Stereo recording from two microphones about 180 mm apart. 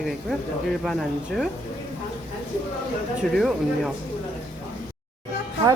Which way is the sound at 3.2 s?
Centre (ahead or behind).